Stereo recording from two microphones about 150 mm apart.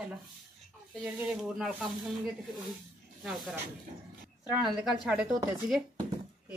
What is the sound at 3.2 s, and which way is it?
Speech, centre (ahead or behind).